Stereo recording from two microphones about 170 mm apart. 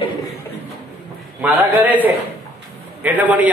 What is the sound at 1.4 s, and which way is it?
A man's voice, 10° right (ahead or behind).